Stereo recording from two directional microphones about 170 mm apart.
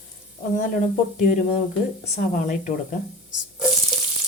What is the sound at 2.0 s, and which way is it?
Speech, 45° left (ahead or behind).